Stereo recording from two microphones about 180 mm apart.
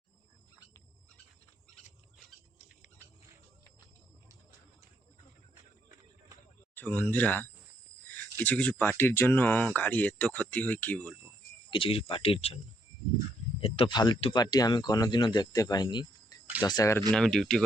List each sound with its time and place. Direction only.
6.7 s speech: 10° left (ahead or behind)
11.7 s speech: 30° left (ahead or behind)
13.6 s speech: 30° left (ahead or behind)
17.1 s speech: centre (ahead or behind)